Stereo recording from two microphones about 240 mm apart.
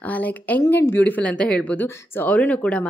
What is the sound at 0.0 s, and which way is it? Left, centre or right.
Speech, centre.